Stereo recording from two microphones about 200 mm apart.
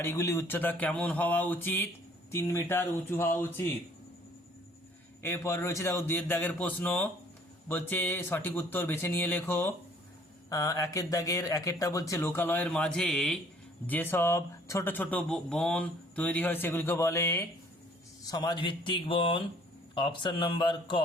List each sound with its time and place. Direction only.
0.0 s speech: 15° left (ahead or behind)
5.2 s speech: 10° left (ahead or behind)